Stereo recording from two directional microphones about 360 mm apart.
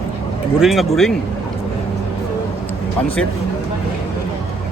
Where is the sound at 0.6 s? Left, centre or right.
Centre.